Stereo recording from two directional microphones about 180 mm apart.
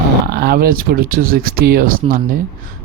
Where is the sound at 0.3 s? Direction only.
60° right (ahead or behind).